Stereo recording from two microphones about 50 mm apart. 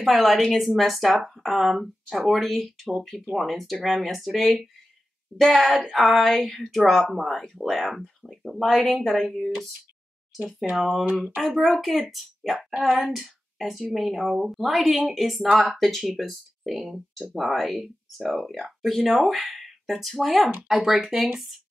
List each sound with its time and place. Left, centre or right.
0.0 s speech: centre
5.8 s speech: centre
6.0 s speech: centre
10.8 s speech: centre
12.5 s a woman's voice: centre
13.2 s speech: centre